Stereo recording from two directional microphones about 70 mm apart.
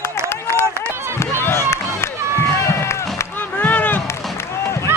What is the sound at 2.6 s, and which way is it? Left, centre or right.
Run, left.